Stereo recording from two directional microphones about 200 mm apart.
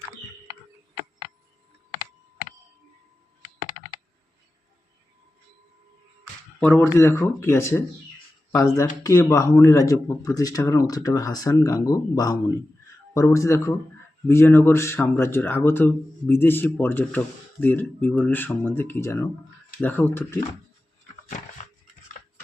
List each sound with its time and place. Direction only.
6.6 s speech: 10° left (ahead or behind)